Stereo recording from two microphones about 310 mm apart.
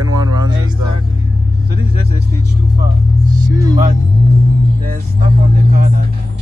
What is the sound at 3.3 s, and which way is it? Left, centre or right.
Speech, centre.